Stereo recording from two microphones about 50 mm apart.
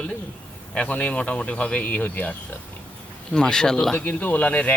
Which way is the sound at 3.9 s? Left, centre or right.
Left.